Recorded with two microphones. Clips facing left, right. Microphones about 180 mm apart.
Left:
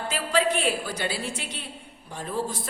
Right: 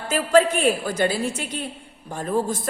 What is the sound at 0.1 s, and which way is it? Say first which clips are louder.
A woman's voice: right 8 dB; 45° right (ahead or behind).